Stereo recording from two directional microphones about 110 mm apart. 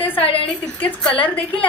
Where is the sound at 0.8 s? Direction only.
15° left (ahead or behind).